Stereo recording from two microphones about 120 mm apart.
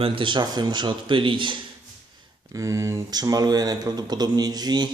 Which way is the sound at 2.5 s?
25° right (ahead or behind).